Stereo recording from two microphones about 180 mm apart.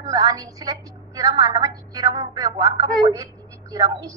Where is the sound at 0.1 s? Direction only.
20° right (ahead or behind).